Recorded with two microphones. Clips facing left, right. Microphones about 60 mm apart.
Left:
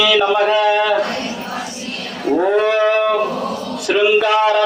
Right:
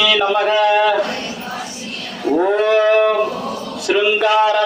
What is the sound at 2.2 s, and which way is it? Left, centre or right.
Livestock, centre.